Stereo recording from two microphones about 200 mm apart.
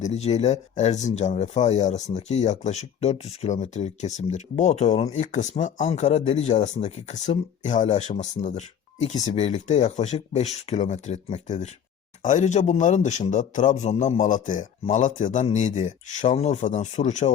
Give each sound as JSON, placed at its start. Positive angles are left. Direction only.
{"t": 0.0, "sound": "speech", "side_deg": 30}